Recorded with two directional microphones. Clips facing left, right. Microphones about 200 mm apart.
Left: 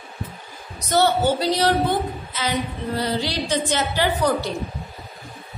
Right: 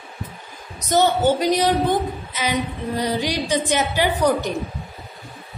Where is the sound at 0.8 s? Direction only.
15° right (ahead or behind).